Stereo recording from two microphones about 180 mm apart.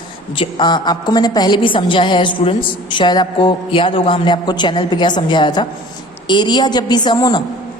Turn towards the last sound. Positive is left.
turn(degrees=25)  # may be behind; listen again after turning